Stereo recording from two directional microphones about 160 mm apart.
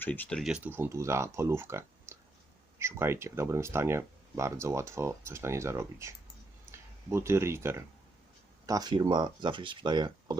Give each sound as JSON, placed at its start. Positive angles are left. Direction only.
{"t": 0.0, "sound": "speech", "side_deg": 10}
{"t": 0.5, "sound": "speech", "side_deg": -10}